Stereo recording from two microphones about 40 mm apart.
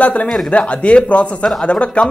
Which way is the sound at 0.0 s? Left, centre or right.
Left.